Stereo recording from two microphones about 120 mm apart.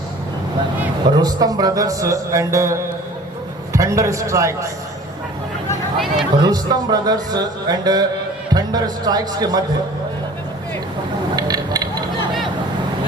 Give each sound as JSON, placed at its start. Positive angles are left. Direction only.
{"t": 1.0, "sound": "a man's voice", "side_deg": -35}
{"t": 6.4, "sound": "speech", "side_deg": -35}
{"t": 11.3, "sound": "a sound", "side_deg": -35}